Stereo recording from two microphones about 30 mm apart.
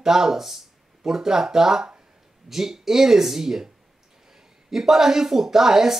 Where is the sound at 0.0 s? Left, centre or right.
Centre.